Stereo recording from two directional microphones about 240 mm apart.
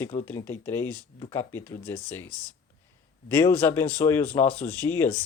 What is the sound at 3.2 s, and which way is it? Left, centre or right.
Speech, centre.